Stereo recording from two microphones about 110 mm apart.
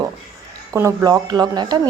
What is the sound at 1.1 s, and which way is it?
Speech, 40° right (ahead or behind).